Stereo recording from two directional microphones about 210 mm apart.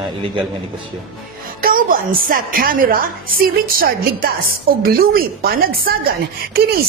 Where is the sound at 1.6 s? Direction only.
40° right (ahead or behind).